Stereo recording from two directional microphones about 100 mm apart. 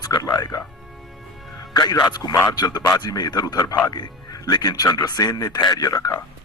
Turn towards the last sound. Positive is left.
turn(degrees=35)  # may be behind; listen again after turning